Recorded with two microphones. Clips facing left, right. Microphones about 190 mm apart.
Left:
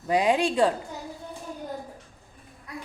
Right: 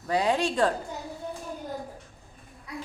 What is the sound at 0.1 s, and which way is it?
Speech, 10° left (ahead or behind).